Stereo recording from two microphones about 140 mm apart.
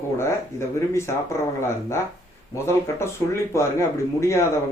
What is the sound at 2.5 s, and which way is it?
Speech, 20° left (ahead or behind).